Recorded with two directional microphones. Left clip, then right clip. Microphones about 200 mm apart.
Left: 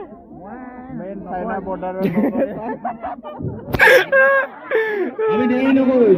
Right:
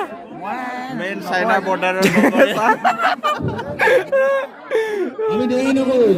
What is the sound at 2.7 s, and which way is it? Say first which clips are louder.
Speech: right 11 dB; 25° right (ahead or behind).